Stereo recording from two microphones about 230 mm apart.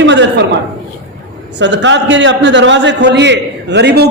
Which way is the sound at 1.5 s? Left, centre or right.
Right.